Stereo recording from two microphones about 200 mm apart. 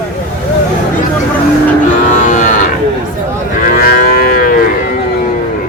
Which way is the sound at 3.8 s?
50° left (ahead or behind).